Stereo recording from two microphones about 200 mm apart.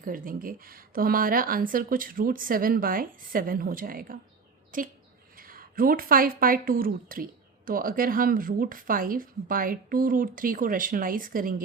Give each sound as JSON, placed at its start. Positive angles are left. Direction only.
{"t": 0.0, "sound": "speech", "side_deg": -45}